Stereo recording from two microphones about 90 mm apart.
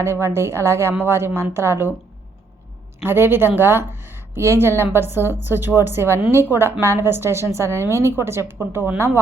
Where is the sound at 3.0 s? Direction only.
25° right (ahead or behind).